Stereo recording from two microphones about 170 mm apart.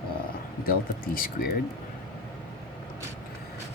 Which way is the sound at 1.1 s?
60° left (ahead or behind).